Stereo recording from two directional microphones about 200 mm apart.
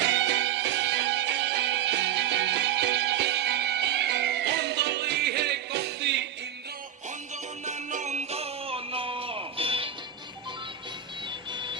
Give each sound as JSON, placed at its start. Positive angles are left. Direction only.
{"t": 0.0, "sound": "music", "side_deg": -65}
{"t": 7.6, "sound": "music", "side_deg": -35}
{"t": 11.5, "sound": "music", "side_deg": -25}